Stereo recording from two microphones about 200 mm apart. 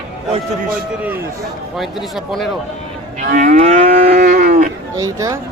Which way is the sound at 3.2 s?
40° right (ahead or behind).